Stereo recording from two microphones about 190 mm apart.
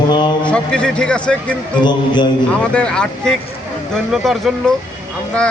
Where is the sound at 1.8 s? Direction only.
25° left (ahead or behind).